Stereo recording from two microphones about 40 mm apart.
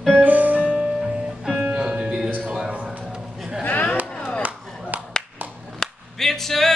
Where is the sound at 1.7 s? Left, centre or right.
Right.